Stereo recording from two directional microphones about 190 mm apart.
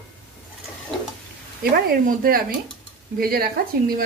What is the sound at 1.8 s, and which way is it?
A woman's voice, 50° right (ahead or behind).